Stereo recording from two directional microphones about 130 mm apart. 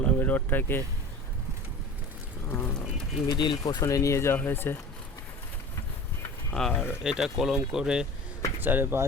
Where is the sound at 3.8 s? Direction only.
25° left (ahead or behind).